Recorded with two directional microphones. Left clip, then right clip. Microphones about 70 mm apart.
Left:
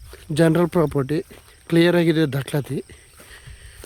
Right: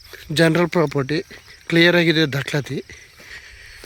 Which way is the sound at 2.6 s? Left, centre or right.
Left.